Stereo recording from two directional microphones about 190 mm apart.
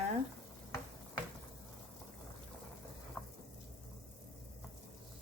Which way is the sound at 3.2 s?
10° left (ahead or behind).